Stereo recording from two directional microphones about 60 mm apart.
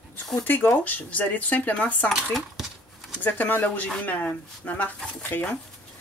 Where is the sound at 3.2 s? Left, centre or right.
Left.